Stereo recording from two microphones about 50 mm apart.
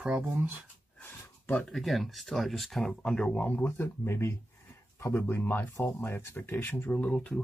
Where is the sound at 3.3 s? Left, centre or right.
Left.